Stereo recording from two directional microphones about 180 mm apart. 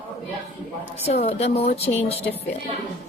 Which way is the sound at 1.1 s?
35° left (ahead or behind).